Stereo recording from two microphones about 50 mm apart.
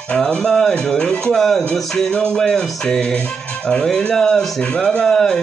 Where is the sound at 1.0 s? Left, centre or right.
Left.